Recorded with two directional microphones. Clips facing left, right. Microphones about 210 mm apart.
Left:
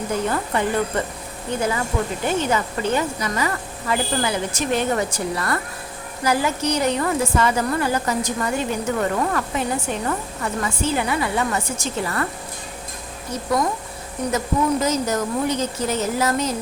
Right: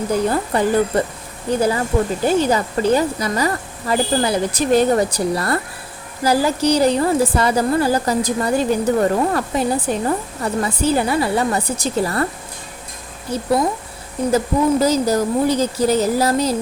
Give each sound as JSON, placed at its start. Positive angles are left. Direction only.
{"t": 0.3, "sound": "a woman's voice", "side_deg": -35}
{"t": 13.3, "sound": "a woman's voice", "side_deg": -30}